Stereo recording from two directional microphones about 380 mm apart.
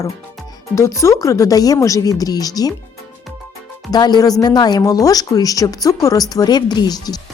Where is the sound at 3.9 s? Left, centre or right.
Centre.